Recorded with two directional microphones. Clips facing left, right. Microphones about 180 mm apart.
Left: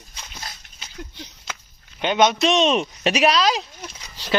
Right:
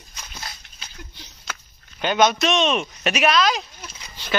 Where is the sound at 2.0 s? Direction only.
20° left (ahead or behind).